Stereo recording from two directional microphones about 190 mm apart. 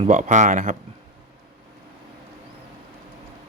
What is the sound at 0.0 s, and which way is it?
Speech, 40° right (ahead or behind).